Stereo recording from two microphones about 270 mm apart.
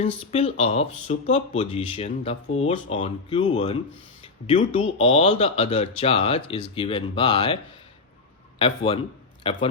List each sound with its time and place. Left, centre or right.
0.0 s a man's voice: left